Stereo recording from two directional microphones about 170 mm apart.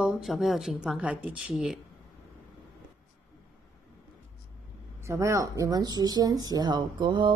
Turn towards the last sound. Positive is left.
turn(degrees=-25)  # may be behind; listen again after turning